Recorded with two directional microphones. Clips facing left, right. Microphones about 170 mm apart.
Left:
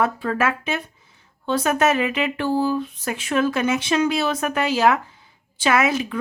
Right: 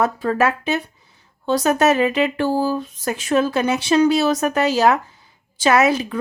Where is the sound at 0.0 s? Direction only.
40° right (ahead or behind).